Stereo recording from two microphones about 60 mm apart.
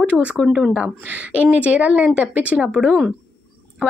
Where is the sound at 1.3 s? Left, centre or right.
Right.